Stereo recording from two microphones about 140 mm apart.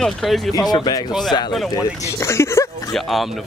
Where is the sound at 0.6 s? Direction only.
30° left (ahead or behind).